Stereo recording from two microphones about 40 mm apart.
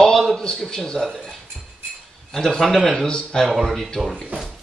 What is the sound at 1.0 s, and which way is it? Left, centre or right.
Speech, centre.